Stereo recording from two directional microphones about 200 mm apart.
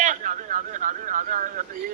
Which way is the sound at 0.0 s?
40° right (ahead or behind).